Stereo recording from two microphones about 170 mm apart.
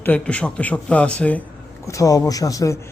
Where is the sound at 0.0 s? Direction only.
10° left (ahead or behind).